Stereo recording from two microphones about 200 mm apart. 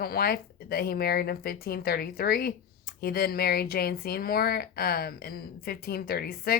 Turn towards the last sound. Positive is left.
turn(degrees=50)  # may be behind; listen again after turning